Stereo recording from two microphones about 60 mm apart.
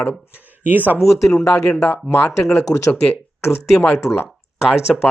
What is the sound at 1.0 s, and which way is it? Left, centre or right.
Speech, left.